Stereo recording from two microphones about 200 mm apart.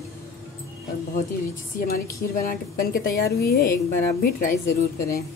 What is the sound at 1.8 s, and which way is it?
A woman's voice, 45° left (ahead or behind).